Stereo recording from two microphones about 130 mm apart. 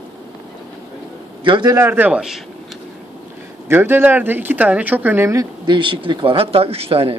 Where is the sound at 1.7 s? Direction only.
15° right (ahead or behind).